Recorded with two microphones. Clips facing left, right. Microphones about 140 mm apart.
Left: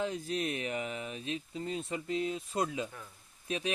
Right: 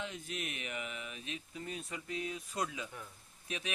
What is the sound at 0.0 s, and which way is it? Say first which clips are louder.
Speech: left 8 dB; 35° left (ahead or behind).